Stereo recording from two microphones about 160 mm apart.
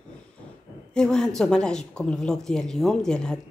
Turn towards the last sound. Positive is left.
turn(degrees=5)  # may be behind; listen again after turning